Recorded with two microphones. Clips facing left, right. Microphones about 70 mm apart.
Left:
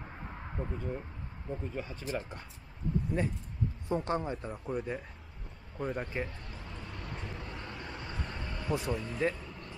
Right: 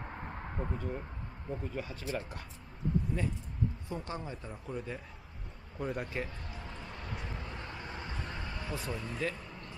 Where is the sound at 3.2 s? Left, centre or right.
Left.